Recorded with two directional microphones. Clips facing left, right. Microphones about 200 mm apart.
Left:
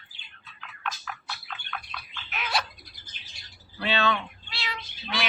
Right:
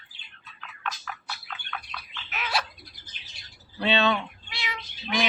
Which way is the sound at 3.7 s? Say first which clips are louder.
Right 3 dB; 25° right (ahead or behind).